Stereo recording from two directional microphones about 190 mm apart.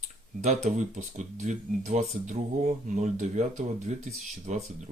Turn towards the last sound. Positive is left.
turn(degrees=-40)  # may be behind; listen again after turning